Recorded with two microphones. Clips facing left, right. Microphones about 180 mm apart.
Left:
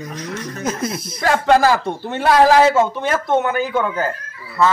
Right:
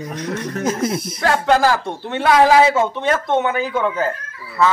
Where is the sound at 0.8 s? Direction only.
75° right (ahead or behind).